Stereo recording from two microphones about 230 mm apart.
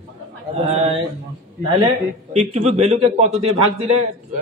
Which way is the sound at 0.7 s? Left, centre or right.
Right.